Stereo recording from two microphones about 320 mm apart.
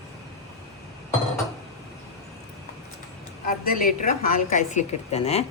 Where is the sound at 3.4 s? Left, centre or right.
Left.